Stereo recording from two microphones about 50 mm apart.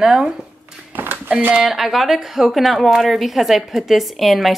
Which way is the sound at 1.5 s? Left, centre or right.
Right.